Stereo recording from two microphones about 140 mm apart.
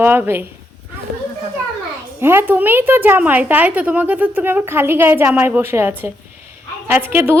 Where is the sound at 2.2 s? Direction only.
15° right (ahead or behind).